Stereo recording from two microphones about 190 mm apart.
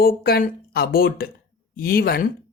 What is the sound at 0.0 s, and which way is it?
Speech, 55° left (ahead or behind).